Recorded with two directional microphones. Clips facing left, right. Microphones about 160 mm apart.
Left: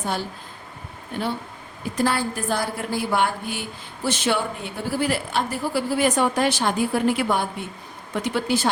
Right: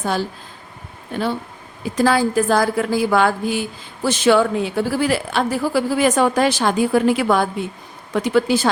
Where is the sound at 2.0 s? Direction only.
90° right.